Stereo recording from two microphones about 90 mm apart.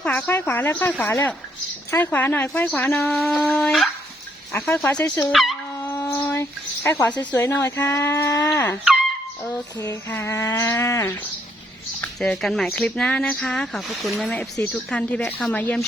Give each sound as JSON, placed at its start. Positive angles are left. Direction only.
{"t": 0.3, "sound": "a sound", "side_deg": 20}
{"t": 3.5, "sound": "speech", "side_deg": 5}
{"t": 5.2, "sound": "speech", "side_deg": 0}
{"t": 5.8, "sound": "a sound", "side_deg": 25}
{"t": 6.9, "sound": "speech", "side_deg": 20}
{"t": 7.5, "sound": "a sound", "side_deg": 25}
{"t": 8.5, "sound": "dog", "side_deg": 25}
{"t": 8.8, "sound": "speech", "side_deg": -5}
{"t": 10.1, "sound": "a sound", "side_deg": 25}
{"t": 12.2, "sound": "speech", "side_deg": 5}
{"t": 14.2, "sound": "speech", "side_deg": 10}
{"t": 15.2, "sound": "speech", "side_deg": 5}
{"t": 15.5, "sound": "speech", "side_deg": 15}